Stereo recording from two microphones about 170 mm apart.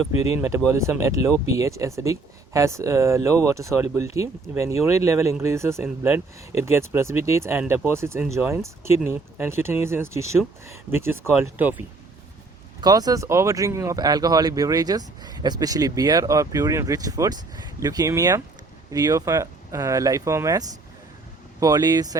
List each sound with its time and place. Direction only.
0.2 s speech: 15° right (ahead or behind)
12.8 s speech: 20° right (ahead or behind)